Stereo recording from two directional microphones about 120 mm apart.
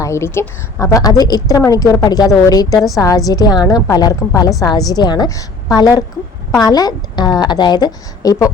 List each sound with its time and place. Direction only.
0.0 s a woman's voice: 25° left (ahead or behind)